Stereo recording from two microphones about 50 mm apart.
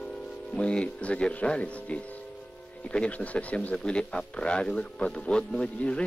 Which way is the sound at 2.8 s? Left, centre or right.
Left.